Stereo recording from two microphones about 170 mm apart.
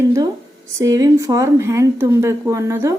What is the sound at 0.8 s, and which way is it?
Speech, 20° right (ahead or behind).